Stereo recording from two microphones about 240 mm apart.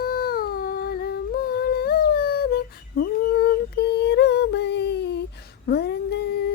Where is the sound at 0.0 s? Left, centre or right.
Left.